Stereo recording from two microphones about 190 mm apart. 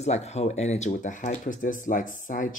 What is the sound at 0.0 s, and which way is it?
Speech, 35° left (ahead or behind).